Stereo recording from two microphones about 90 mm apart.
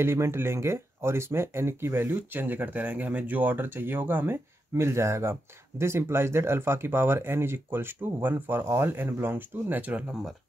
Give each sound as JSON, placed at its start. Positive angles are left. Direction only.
{"t": 0.0, "sound": "speech", "side_deg": -30}